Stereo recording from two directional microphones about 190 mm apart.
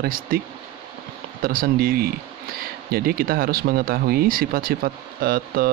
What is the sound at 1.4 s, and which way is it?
Speech, 50° right (ahead or behind).